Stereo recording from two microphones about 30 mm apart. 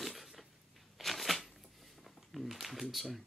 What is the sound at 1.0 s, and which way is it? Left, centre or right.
Shuffling cards, centre.